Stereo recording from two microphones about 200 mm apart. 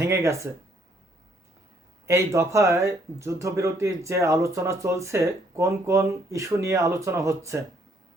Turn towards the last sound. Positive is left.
turn(degrees=-15)  # may be behind; listen again after turning